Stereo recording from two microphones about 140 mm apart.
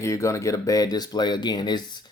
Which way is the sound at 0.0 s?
20° left (ahead or behind).